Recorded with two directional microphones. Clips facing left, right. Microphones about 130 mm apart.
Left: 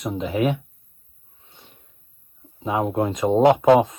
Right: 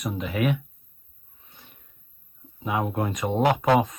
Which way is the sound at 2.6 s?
20° left (ahead or behind).